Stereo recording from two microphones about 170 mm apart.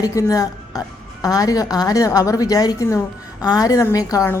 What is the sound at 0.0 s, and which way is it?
A woman's voice, 20° left (ahead or behind).